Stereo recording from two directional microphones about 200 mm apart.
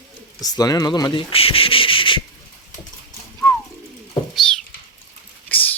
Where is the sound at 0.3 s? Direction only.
20° left (ahead or behind).